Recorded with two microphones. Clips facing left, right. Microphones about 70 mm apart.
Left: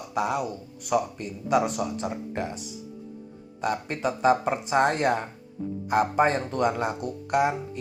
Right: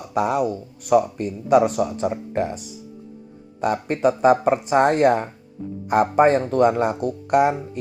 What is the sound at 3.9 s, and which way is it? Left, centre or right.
Speech, right.